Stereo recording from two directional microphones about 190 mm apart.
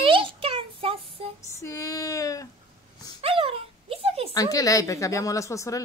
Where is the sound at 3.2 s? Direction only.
30° right (ahead or behind).